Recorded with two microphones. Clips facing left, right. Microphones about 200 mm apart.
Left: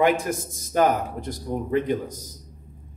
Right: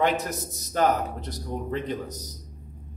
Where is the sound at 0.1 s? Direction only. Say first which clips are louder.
Left 4 dB; 50° left (ahead or behind).